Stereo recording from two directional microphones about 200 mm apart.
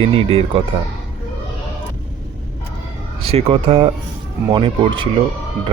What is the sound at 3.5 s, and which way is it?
Speech, 30° right (ahead or behind).